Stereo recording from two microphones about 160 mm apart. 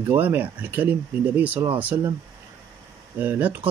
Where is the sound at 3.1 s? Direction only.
10° right (ahead or behind).